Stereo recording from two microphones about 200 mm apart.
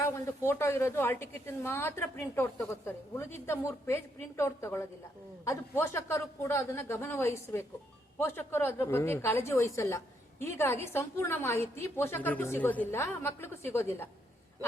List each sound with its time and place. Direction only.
0.0 s a woman's voice: 10° left (ahead or behind)